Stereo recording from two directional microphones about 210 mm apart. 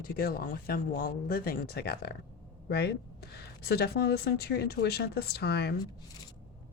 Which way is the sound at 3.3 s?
50° left (ahead or behind).